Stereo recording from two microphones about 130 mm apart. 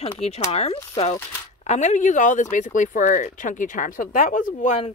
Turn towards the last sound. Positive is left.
turn(degrees=65)  # may be behind; listen again after turning